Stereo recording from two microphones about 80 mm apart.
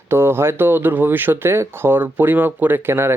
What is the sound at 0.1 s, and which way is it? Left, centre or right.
Speech, right.